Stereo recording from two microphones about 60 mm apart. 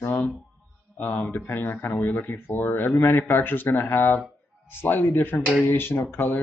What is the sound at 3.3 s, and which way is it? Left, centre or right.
Speech, left.